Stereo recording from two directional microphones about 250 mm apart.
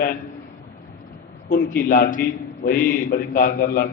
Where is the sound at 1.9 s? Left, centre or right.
Left.